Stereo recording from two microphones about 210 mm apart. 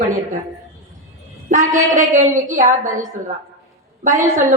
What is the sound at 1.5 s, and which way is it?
A woman's voice, 35° right (ahead or behind).